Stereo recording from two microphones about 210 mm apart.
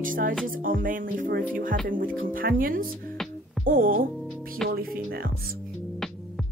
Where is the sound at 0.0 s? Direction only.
40° right (ahead or behind).